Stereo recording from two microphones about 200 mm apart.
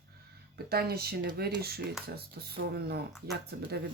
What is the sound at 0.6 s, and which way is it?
Speech, 50° right (ahead or behind).